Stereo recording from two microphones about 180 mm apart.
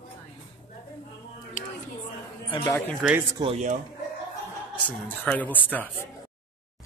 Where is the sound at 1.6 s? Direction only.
45° left (ahead or behind).